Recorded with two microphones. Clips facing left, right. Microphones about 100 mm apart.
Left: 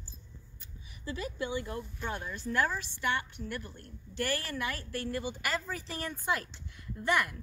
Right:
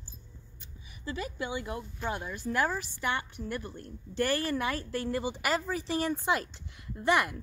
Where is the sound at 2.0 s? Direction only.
15° right (ahead or behind).